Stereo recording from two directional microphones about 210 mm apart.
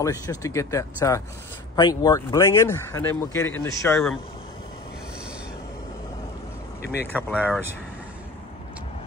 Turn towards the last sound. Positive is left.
turn(degrees=-5)  # may be behind; listen again after turning